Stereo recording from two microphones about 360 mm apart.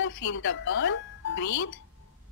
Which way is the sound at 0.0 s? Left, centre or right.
Left.